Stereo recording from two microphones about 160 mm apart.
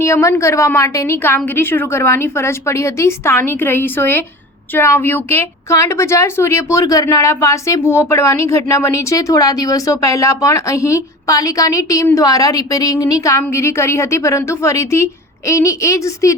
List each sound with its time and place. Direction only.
0.0 s a woman's voice: 20° left (ahead or behind)